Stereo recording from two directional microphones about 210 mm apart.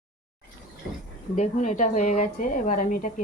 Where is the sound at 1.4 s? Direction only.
35° left (ahead or behind).